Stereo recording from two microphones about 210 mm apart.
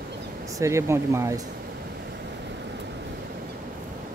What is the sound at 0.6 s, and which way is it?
Speech, 15° right (ahead or behind).